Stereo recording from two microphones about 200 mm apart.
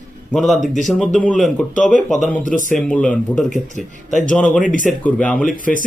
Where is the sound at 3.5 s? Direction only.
40° left (ahead or behind).